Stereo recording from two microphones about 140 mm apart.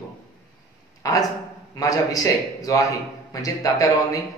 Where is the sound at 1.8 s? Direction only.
25° left (ahead or behind).